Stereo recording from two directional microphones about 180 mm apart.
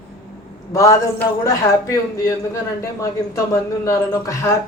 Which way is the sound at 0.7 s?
20° left (ahead or behind).